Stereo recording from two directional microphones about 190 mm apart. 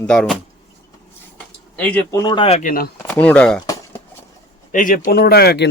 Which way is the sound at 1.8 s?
10° left (ahead or behind).